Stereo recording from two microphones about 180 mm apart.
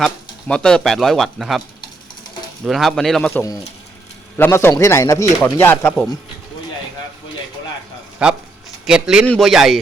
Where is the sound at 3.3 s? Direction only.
20° left (ahead or behind).